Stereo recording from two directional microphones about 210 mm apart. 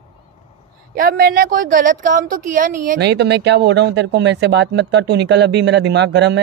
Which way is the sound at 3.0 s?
55° right (ahead or behind).